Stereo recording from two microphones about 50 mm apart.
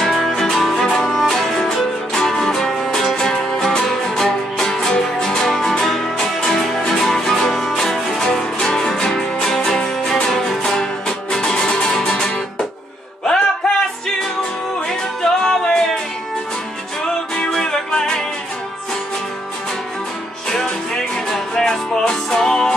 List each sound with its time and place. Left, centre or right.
0.4 s music: centre
15.4 s music: centre
17.4 s music: centre
20.4 s music: centre